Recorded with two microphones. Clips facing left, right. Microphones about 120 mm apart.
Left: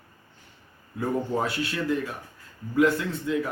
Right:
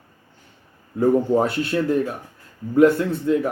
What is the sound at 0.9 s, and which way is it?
Speech, 45° right (ahead or behind).